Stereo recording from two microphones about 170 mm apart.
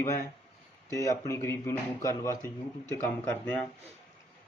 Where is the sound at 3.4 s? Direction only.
5° left (ahead or behind).